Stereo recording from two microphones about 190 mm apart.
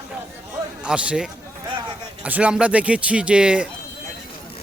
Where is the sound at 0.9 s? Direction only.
5° right (ahead or behind).